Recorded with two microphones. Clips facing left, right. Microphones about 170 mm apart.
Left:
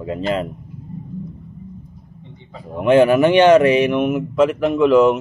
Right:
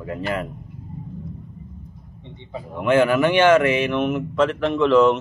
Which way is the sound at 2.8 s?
20° left (ahead or behind).